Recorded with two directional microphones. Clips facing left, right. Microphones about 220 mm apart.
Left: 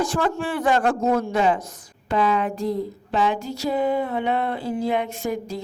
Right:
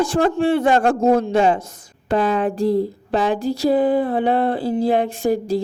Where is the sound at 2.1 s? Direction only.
45° right (ahead or behind).